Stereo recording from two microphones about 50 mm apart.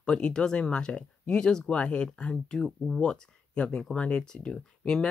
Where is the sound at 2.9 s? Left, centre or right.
Centre.